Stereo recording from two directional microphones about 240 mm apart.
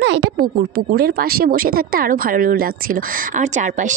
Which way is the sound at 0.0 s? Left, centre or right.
Right.